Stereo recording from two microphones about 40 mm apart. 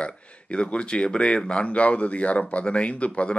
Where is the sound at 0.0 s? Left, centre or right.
Left.